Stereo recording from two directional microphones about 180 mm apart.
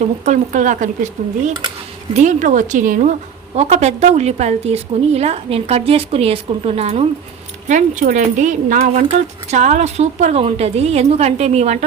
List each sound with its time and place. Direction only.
0.3 s a woman's voice: 45° right (ahead or behind)
7.7 s a woman's voice: 45° right (ahead or behind)